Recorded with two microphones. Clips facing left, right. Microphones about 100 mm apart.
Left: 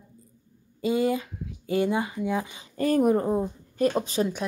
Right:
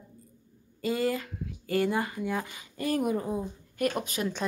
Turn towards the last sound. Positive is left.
turn(degrees=30)  # may be behind; listen again after turning